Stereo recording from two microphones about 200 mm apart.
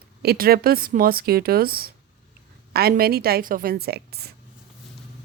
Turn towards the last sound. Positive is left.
turn(degrees=-55)  # may be behind; listen again after turning